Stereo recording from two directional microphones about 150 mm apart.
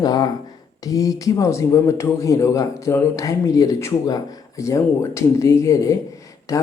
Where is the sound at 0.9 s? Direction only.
25° left (ahead or behind).